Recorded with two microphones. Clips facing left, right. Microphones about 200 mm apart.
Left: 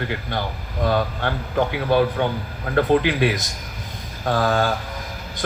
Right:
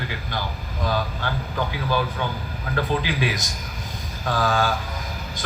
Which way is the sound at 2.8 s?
60° left (ahead or behind).